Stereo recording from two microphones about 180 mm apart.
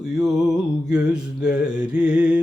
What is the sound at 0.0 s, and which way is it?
Music, 5° right (ahead or behind).